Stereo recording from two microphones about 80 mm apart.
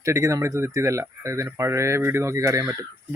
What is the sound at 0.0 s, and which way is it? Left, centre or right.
Speech, right.